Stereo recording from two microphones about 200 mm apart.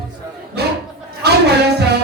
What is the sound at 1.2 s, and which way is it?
Music, 55° right (ahead or behind).